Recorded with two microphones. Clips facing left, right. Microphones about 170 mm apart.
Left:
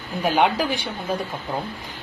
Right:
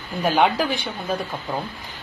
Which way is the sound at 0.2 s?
Centre (ahead or behind).